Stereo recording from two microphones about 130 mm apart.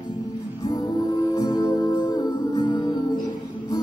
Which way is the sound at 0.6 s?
30° left (ahead or behind).